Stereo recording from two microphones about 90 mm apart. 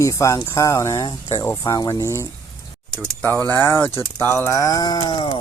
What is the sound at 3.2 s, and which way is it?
Speech, 25° left (ahead or behind).